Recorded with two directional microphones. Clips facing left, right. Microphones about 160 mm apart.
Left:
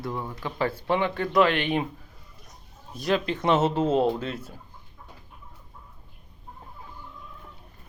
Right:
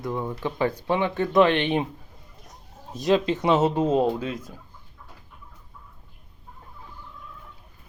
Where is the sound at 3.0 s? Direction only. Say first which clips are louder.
Right 4 dB; 20° right (ahead or behind).